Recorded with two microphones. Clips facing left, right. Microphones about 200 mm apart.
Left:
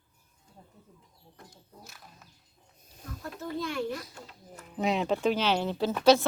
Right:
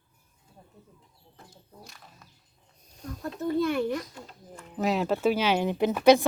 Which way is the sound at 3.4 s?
55° right (ahead or behind).